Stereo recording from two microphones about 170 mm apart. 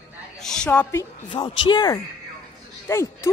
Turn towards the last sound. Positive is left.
turn(degrees=15)  # may be behind; listen again after turning